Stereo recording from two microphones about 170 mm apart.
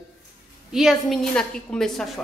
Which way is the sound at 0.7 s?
Centre (ahead or behind).